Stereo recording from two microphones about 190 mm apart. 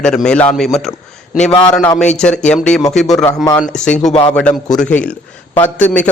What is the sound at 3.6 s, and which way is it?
A man's voice, 5° left (ahead or behind).